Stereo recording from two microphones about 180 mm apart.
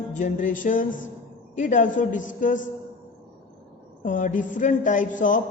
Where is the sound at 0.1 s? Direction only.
45° left (ahead or behind).